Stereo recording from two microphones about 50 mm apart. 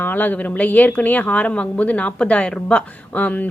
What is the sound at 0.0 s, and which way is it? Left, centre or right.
A woman's voice, left.